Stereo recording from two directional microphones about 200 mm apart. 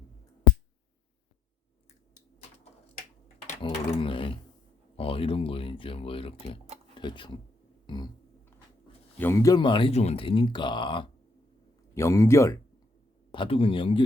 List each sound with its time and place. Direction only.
3.3 s typing: 30° left (ahead or behind)
4.9 s speech: 25° left (ahead or behind)
7.9 s a sound: 20° left (ahead or behind)
9.1 s speech: 10° left (ahead or behind)
11.9 s speech: 15° left (ahead or behind)
13.3 s speech: 25° left (ahead or behind)